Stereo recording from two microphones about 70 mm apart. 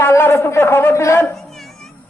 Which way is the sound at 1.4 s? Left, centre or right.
Centre.